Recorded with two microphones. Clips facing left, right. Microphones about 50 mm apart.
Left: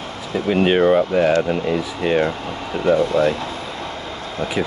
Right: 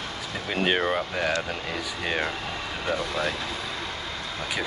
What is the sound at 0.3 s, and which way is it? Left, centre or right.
Speech, centre.